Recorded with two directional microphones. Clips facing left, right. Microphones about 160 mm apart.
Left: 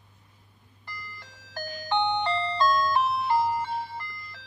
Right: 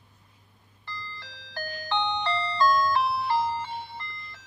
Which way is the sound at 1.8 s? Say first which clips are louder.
Left 3 dB; 20° left (ahead or behind).